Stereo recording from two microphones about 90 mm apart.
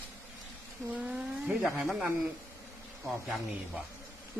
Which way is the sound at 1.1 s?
5° right (ahead or behind).